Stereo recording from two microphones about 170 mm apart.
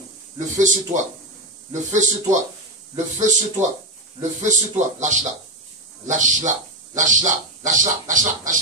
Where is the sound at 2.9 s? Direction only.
45° right (ahead or behind).